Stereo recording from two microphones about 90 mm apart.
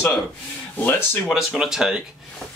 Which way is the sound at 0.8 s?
25° left (ahead or behind).